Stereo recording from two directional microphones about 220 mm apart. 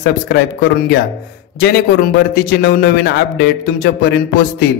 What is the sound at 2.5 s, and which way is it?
A man's voice, 50° left (ahead or behind).